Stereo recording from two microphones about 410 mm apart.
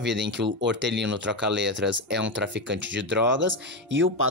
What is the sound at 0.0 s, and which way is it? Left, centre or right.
Speech, right.